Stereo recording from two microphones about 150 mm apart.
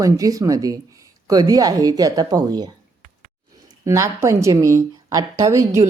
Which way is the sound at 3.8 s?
20° right (ahead or behind).